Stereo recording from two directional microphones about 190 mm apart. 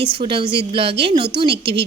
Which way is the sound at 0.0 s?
30° right (ahead or behind).